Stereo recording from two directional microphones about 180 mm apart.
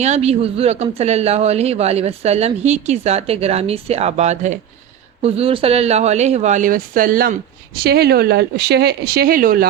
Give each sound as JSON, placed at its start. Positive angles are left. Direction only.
{"t": 0.0, "sound": "speech", "side_deg": -35}
{"t": 7.8, "sound": "speech", "side_deg": -60}